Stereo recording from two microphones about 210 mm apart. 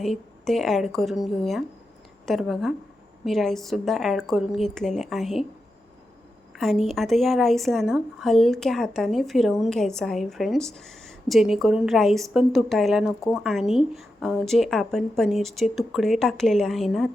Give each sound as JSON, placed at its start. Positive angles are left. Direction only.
{"t": 0.0, "sound": "speech", "side_deg": 0}
{"t": 6.6, "sound": "speech", "side_deg": 0}